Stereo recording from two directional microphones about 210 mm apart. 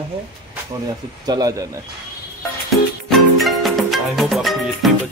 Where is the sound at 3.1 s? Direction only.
Centre (ahead or behind).